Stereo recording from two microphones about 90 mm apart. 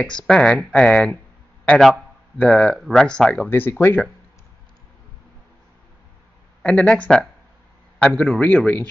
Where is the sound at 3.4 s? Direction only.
25° left (ahead or behind).